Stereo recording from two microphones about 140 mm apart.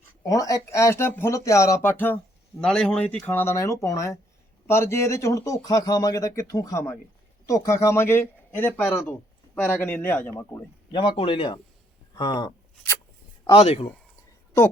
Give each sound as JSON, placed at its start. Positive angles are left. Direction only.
{"t": 0.2, "sound": "speech", "side_deg": 25}
{"t": 10.9, "sound": "speech", "side_deg": 35}
{"t": 13.5, "sound": "speech", "side_deg": 45}